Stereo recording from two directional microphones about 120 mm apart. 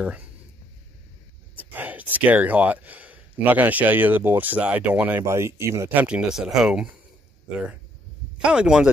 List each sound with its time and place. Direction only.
0.0 s speech: 10° right (ahead or behind)
1.6 s speech: 15° right (ahead or behind)
6.0 s speech: 5° right (ahead or behind)
8.4 s speech: 10° right (ahead or behind)